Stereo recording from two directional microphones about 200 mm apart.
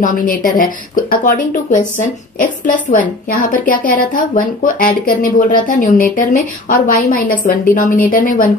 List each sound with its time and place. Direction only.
0.0 s speech: 40° left (ahead or behind)